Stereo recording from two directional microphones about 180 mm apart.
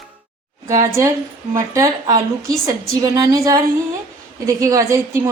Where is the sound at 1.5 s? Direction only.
15° right (ahead or behind).